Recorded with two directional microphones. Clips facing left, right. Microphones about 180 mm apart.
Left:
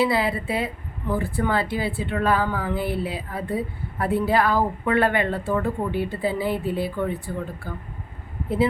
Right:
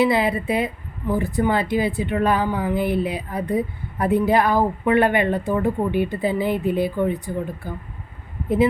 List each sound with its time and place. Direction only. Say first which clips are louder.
0.0 s a woman's voice: right 3 dB; 20° right (ahead or behind)